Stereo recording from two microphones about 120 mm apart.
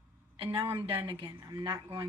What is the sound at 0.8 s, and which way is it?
Speech, 40° right (ahead or behind).